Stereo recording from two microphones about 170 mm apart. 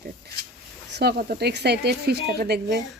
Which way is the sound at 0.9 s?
70° right (ahead or behind).